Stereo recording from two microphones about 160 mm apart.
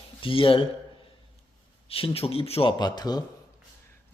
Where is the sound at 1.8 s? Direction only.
35° left (ahead or behind).